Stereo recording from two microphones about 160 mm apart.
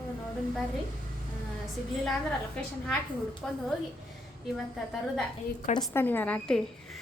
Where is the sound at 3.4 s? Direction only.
5° left (ahead or behind).